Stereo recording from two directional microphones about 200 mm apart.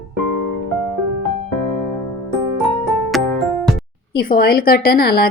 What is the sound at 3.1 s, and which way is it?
Music, centre (ahead or behind).